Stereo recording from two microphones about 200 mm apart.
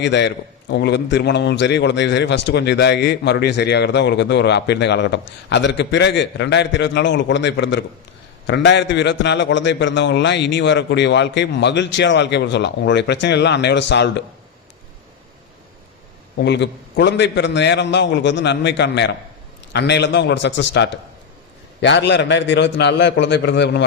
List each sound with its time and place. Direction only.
0.0 s a man's voice: 60° left (ahead or behind)
16.4 s a man's voice: 60° left (ahead or behind)